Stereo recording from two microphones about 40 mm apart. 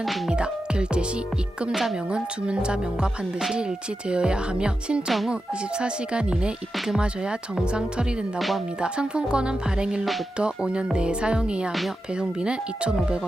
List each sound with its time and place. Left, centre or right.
0.3 s speech: right
1.7 s speech: centre
2.0 s speech: right
6.7 s speech: centre
7.0 s speech: right
8.4 s speech: centre
8.8 s speech: right